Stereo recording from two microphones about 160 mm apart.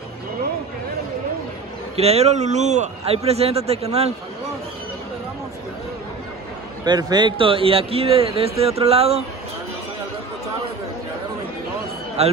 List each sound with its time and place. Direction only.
2.0 s speech: 40° right (ahead or behind)
6.8 s speech: 25° right (ahead or behind)
12.2 s speech: 40° right (ahead or behind)